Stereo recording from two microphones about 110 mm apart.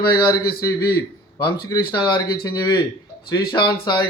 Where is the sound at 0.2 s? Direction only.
40° left (ahead or behind).